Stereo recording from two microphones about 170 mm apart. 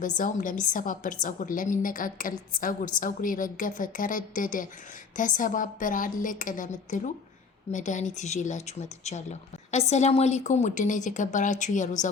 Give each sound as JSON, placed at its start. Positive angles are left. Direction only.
{"t": 0.2, "sound": "speech", "side_deg": 50}